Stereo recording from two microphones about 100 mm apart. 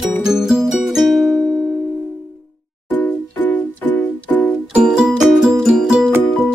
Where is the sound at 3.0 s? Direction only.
15° left (ahead or behind).